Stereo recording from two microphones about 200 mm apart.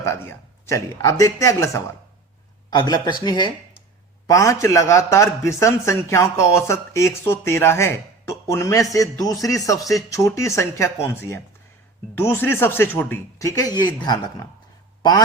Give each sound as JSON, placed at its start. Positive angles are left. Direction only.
{"t": 0.0, "sound": "a man's voice", "side_deg": 15}